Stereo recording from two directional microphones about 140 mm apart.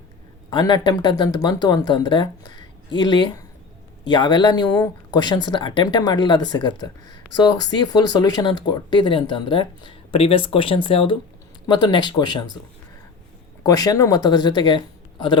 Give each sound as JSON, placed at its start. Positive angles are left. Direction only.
{"t": 0.5, "sound": "speech", "side_deg": 30}
{"t": 13.7, "sound": "speech", "side_deg": 25}